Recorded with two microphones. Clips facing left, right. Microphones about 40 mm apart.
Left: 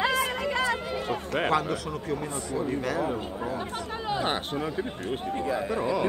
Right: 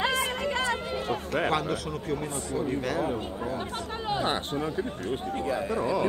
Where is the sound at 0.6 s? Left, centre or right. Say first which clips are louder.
Left 1 dB; right.